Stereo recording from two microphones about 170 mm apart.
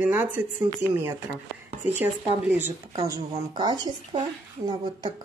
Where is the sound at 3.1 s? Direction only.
25° right (ahead or behind).